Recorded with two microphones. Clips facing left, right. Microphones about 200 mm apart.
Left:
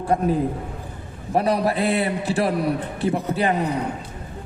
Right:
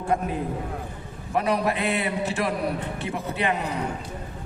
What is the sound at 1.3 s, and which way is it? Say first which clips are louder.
A man's voice: left 3 dB; 35° left (ahead or behind).